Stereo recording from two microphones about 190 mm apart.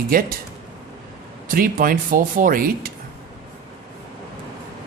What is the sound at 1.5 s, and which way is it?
Speech, 50° right (ahead or behind).